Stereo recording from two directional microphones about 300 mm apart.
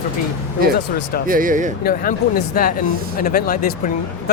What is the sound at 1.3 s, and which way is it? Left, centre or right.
Speech, right.